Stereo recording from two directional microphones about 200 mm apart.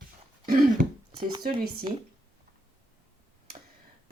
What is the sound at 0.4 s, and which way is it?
Throat clearing, 45° right (ahead or behind).